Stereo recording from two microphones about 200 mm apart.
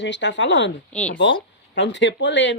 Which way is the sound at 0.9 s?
5° left (ahead or behind).